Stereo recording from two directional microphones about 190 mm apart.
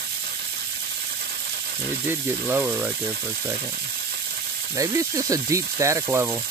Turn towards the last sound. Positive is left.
turn(degrees=-10)  # may be behind; listen again after turning